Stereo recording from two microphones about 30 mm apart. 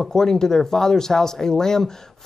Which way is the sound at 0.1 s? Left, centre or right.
Centre.